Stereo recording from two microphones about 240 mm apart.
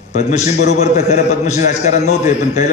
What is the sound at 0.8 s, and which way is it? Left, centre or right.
A man's voice, left.